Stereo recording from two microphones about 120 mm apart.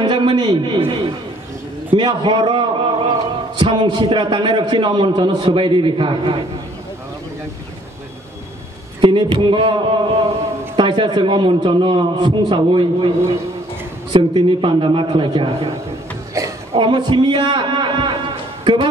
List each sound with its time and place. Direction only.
0.0 s a sound: 40° right (ahead or behind)
0.7 s a man's voice: 50° right (ahead or behind)
2.0 s a man's voice: 40° right (ahead or behind)
9.0 s a man's voice: 45° right (ahead or behind)
16.7 s a man's voice: 40° right (ahead or behind)